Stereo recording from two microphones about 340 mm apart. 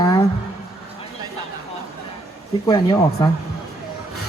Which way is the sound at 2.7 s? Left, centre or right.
Centre.